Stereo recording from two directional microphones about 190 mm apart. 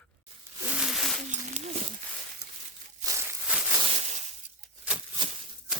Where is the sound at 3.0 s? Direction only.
15° right (ahead or behind).